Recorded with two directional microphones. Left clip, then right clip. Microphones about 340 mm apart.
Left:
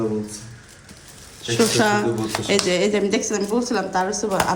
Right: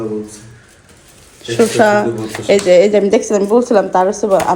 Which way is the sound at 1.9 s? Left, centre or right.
Left.